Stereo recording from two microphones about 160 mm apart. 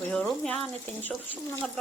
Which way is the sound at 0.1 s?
5° left (ahead or behind).